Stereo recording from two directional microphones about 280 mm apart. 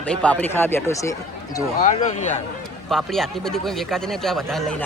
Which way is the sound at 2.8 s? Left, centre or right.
Centre.